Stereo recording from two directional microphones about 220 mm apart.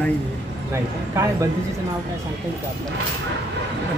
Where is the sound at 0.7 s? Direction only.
15° right (ahead or behind).